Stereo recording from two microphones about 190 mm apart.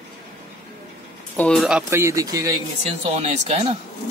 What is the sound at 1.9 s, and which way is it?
Speech, 15° right (ahead or behind).